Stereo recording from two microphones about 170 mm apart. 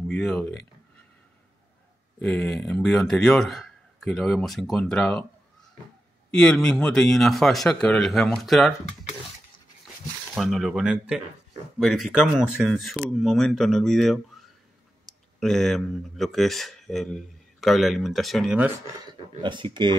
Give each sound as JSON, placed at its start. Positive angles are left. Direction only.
{"t": 0.1, "sound": "speech", "side_deg": 5}
{"t": 2.1, "sound": "speech", "side_deg": 5}
{"t": 6.3, "sound": "speech", "side_deg": 5}
{"t": 10.3, "sound": "speech", "side_deg": 0}
{"t": 19.0, "sound": "speech", "side_deg": -30}